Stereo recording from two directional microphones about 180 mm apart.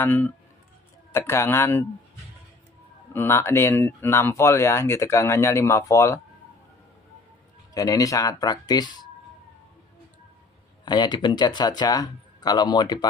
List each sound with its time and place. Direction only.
0.0 s speech: 10° left (ahead or behind)
3.1 s speech: 15° left (ahead or behind)
7.7 s speech: 20° left (ahead or behind)
10.9 s speech: 25° left (ahead or behind)